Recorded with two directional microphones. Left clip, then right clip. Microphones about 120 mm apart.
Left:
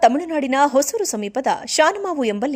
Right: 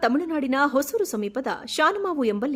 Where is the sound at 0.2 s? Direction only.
15° left (ahead or behind).